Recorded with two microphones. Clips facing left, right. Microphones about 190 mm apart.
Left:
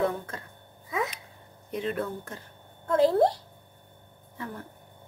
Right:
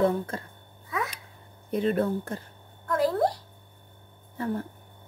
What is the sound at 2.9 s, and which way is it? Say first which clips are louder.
Speech: left 3 dB; 25° left (ahead or behind).